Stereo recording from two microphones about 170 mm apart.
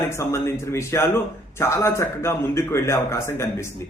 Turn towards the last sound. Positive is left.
turn(degrees=15)  # may be behind; listen again after turning